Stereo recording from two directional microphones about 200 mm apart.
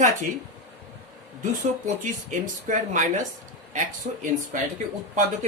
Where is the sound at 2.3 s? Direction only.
40° right (ahead or behind).